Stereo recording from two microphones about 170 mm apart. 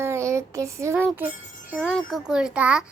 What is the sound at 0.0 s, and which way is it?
A child's voice, 15° right (ahead or behind).